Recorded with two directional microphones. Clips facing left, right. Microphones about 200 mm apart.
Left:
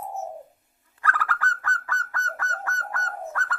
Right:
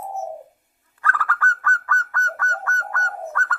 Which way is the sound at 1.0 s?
15° left (ahead or behind).